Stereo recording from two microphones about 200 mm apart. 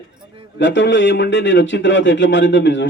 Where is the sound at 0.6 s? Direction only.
65° left (ahead or behind).